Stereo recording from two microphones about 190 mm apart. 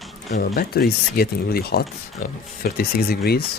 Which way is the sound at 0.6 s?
50° left (ahead or behind).